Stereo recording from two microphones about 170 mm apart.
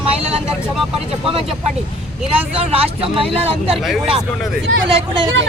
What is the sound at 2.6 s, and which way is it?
Speech, 35° right (ahead or behind).